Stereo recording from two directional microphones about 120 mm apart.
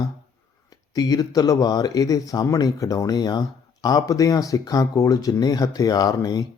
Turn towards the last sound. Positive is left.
turn(degrees=30)  # may be behind; listen again after turning